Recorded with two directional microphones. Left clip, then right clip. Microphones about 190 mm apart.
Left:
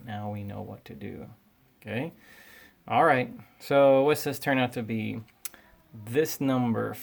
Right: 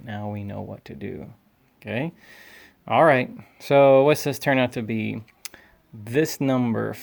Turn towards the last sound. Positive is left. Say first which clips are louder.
# right 4 dB
turn(degrees=-35)  # may be behind; listen again after turning